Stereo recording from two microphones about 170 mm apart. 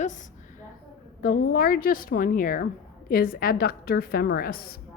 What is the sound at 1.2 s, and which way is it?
A woman's voice, 55° left (ahead or behind).